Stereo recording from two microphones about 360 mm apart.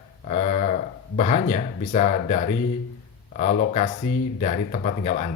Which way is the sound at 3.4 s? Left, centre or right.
Centre.